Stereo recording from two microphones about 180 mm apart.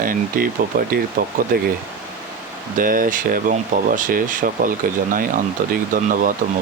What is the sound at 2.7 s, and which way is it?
Speech, 50° right (ahead or behind).